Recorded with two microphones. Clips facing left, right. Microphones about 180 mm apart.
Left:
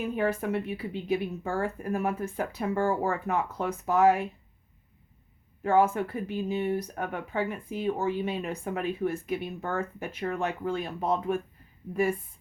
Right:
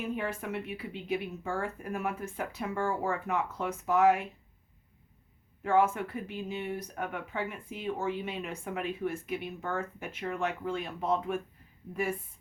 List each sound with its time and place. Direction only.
0.2 s speech: 40° left (ahead or behind)
5.6 s speech: 35° left (ahead or behind)